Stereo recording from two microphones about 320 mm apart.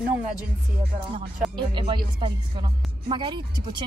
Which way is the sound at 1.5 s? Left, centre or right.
Centre.